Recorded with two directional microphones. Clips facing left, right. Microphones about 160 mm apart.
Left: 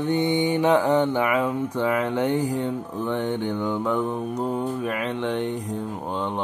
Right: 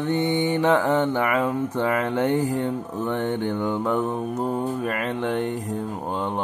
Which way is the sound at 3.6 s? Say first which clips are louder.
Even; 15° right (ahead or behind).